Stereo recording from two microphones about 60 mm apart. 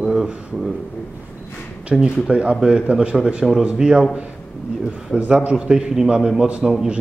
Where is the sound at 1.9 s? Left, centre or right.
Centre.